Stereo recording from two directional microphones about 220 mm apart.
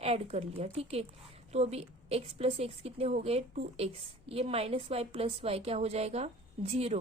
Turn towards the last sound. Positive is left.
turn(degrees=-25)  # may be behind; listen again after turning